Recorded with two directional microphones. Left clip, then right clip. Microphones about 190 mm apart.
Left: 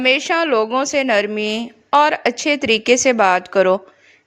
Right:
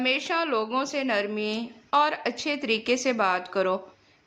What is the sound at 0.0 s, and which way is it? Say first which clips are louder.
A woman's voice: left 10 dB; 35° left (ahead or behind).